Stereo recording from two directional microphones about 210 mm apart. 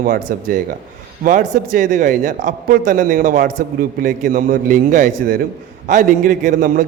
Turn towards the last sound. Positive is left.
turn(degrees=-40)  # may be behind; listen again after turning